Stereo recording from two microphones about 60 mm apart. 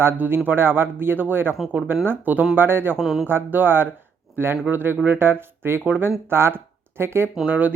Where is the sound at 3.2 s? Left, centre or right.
Right.